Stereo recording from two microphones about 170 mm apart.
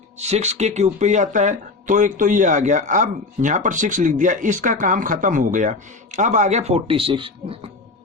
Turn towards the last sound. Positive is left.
turn(degrees=-30)  # may be behind; listen again after turning